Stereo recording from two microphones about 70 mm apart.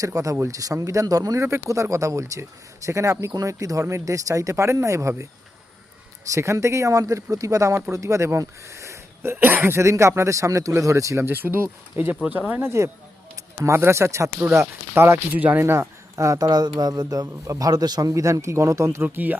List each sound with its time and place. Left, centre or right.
0.0 s speech: right
9.3 s speech: right
11.3 s speech: right
12.6 s speech: right
15.6 s speech: right
16.5 s a man's voice: right
17.2 s a man's voice: right
18.1 s speech: right
19.0 s speech: right